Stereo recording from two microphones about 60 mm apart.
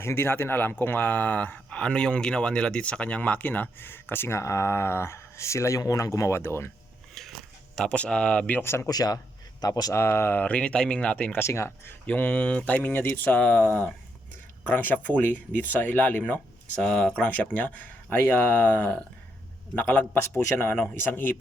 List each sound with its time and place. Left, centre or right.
0.0 s speech: left
4.4 s speech: left
6.3 s speech: left
7.1 s biting: centre
7.9 s speech: centre
8.6 s speech: left
8.9 s speech: left
9.9 s speech: left
10.4 s speech: centre
11.3 s speech: left
12.0 s speech: left
16.8 s speech: centre
17.2 s speech: left
20.6 s speech: left